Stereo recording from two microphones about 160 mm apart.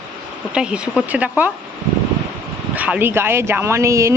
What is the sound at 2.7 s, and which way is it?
Speech, 10° right (ahead or behind).